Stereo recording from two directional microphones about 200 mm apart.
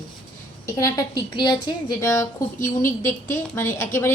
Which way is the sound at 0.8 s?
15° left (ahead or behind).